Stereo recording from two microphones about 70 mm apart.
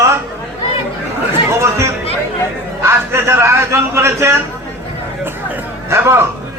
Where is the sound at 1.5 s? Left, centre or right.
Right.